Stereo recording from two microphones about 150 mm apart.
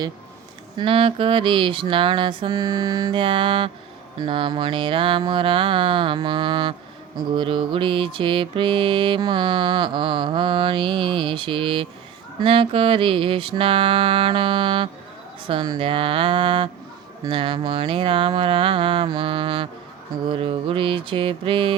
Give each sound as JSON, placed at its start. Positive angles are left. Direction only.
{"t": 0.8, "sound": "mantra", "side_deg": -35}